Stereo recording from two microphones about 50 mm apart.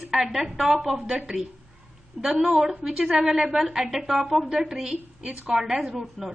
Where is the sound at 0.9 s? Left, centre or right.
Right.